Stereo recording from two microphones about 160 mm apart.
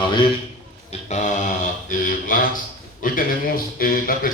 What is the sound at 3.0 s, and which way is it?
A man's voice, 60° left (ahead or behind).